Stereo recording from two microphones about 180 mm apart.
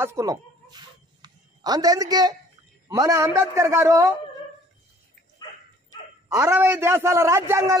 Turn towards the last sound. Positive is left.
turn(degrees=-15)  # may be behind; listen again after turning